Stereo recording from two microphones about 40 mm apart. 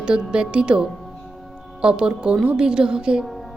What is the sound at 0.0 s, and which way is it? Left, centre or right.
A woman's voice, right.